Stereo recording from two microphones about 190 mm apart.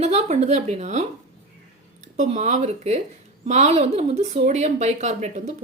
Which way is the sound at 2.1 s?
35° right (ahead or behind).